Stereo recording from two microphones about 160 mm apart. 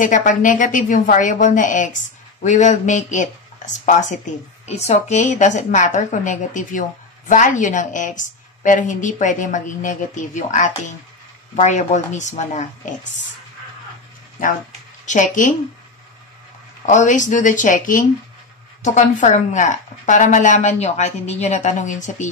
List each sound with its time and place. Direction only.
0.0 s a woman's voice: 55° left (ahead or behind)
15.0 s a woman's voice: 50° left (ahead or behind)
16.8 s a woman's voice: 50° left (ahead or behind)